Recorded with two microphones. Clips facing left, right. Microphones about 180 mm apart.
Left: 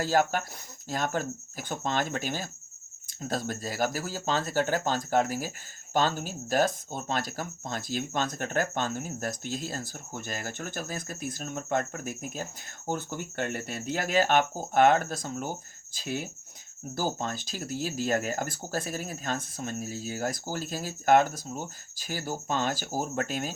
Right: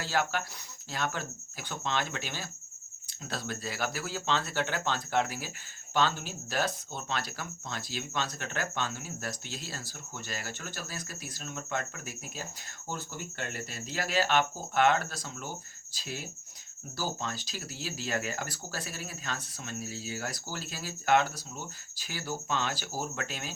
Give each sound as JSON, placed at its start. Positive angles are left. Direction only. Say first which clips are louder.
{"t": 0.0, "sound": "speech", "louder": "left 6 dB", "side_deg": 45}